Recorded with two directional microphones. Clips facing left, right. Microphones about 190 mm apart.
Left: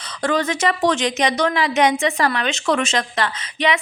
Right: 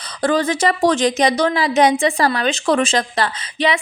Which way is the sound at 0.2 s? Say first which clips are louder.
Right 3 dB; 30° right (ahead or behind).